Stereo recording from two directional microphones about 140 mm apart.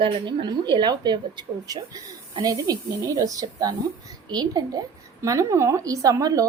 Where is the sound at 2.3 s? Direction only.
25° right (ahead or behind).